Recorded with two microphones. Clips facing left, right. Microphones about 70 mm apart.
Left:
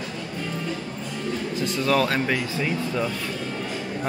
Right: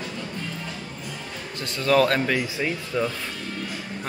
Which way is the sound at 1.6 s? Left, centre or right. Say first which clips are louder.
Right 3 dB; centre.